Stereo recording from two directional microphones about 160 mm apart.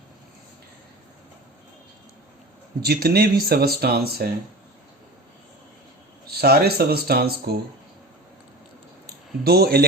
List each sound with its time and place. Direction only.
2.8 s speech: 75° right (ahead or behind)
6.3 s speech: 75° right (ahead or behind)
9.4 s speech: 75° right (ahead or behind)